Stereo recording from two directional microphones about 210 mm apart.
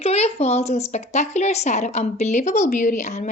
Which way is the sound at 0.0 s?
30° left (ahead or behind).